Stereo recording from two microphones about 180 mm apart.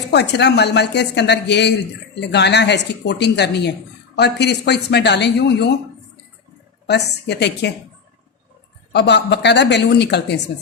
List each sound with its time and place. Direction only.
0.1 s speech: 70° left (ahead or behind)
6.8 s speech: 70° left (ahead or behind)
8.9 s speech: 70° left (ahead or behind)